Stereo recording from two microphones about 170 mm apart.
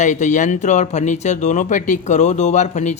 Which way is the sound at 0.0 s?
45° left (ahead or behind).